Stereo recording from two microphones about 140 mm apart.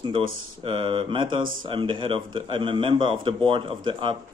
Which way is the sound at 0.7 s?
35° right (ahead or behind).